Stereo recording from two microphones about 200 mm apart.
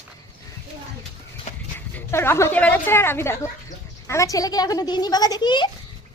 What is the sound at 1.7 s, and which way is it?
A woman's voice, 10° left (ahead or behind).